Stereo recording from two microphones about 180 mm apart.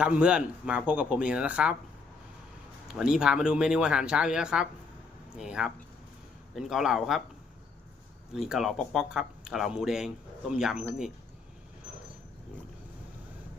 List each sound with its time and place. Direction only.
0.0 s speech: 5° right (ahead or behind)
3.0 s speech: 5° right (ahead or behind)
8.3 s speech: centre (ahead or behind)